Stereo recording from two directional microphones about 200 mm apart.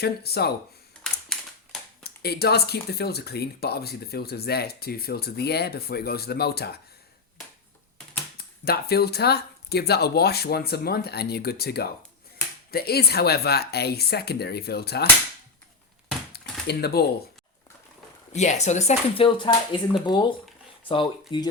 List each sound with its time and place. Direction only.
0.0 s speech: 50° left (ahead or behind)
1.0 s typewriter: centre (ahead or behind)
2.0 s speech: 50° left (ahead or behind)
8.4 s speech: 50° left (ahead or behind)
16.3 s a sound: 55° left (ahead or behind)
18.3 s speech: 35° left (ahead or behind)